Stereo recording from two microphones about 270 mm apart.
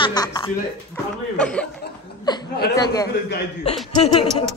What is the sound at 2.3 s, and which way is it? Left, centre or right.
Speech, centre.